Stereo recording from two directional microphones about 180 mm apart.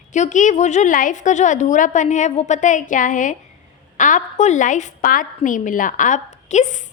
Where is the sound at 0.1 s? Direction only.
40° left (ahead or behind).